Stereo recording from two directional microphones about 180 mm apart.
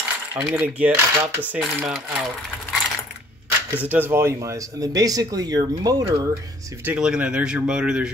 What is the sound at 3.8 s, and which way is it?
Speech, 10° right (ahead or behind).